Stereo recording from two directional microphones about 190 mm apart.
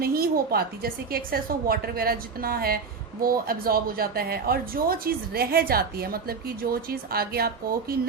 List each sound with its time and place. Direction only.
0.0 s a woman's voice: 50° right (ahead or behind)